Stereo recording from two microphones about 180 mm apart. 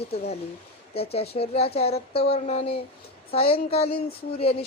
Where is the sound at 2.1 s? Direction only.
65° left (ahead or behind).